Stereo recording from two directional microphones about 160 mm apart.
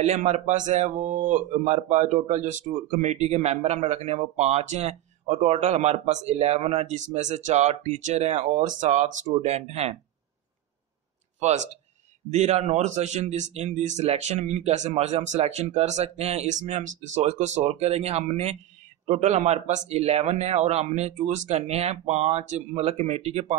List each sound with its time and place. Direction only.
0.0 s speech: 45° right (ahead or behind)
11.3 s speech: 45° right (ahead or behind)